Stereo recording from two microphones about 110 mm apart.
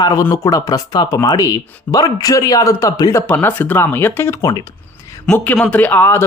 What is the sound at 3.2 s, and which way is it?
Speech, 15° left (ahead or behind).